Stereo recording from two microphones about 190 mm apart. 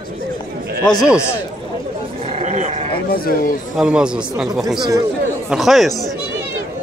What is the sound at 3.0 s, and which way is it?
Speech, 50° left (ahead or behind).